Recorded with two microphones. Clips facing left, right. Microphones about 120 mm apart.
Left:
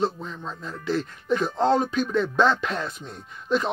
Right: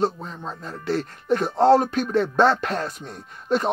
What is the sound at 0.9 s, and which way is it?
Speech, 55° right (ahead or behind).